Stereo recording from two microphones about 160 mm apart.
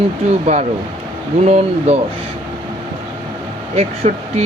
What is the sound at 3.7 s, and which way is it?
Speech, 40° right (ahead or behind).